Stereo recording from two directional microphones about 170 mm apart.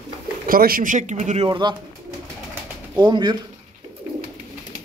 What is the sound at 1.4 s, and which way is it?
Speech, 25° right (ahead or behind).